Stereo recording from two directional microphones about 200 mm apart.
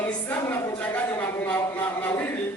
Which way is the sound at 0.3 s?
10° left (ahead or behind).